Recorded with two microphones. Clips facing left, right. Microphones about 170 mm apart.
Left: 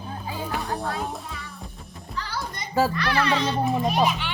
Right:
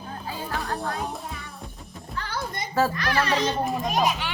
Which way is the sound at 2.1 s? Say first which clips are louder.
Right 1 dB; 50° right (ahead or behind).